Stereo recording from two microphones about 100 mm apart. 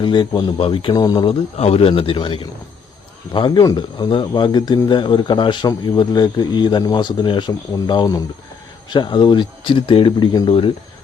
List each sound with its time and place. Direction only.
0.0 s a man's voice: 50° left (ahead or behind)
0.6 s speech: 60° left (ahead or behind)
0.9 s a man's voice: 45° left (ahead or behind)
1.3 s a man's voice: 85° left
2.0 s a man's voice: 60° left (ahead or behind)